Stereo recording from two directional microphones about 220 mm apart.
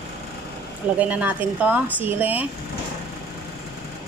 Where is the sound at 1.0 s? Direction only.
5° right (ahead or behind).